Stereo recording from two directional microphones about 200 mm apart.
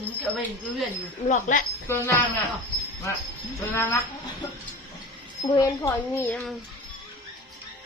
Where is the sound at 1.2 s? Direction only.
40° left (ahead or behind).